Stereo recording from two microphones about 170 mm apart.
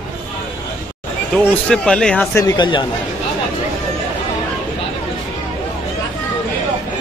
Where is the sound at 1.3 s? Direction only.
5° left (ahead or behind).